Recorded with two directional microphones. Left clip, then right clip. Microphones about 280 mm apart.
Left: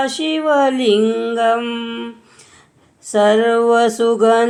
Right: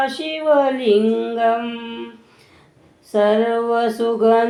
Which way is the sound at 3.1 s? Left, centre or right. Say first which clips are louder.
Left 3 dB; left.